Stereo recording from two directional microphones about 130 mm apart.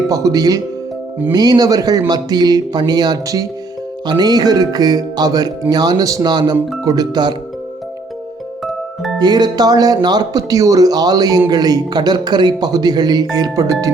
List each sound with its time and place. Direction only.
0.1 s speech: 25° right (ahead or behind)
9.1 s speech: 30° right (ahead or behind)